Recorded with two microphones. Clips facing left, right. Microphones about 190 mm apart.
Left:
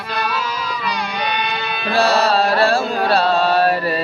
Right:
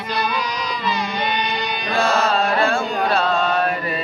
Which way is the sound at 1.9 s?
35° left (ahead or behind).